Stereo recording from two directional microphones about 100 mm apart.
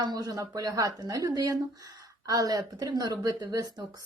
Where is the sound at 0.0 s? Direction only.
40° right (ahead or behind).